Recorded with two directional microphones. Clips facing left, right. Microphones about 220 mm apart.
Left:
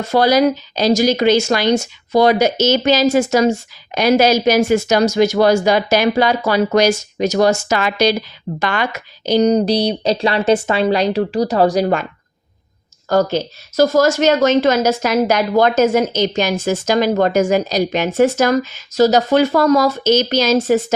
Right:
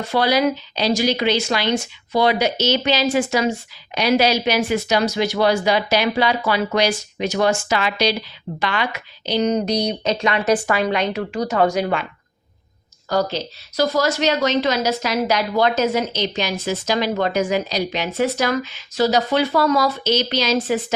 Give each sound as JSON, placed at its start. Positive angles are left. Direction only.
{"t": 0.0, "sound": "a woman's voice", "side_deg": 45}
{"t": 13.1, "sound": "a woman's voice", "side_deg": 50}